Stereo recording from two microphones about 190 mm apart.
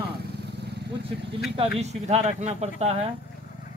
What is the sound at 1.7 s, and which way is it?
Speech, 35° right (ahead or behind).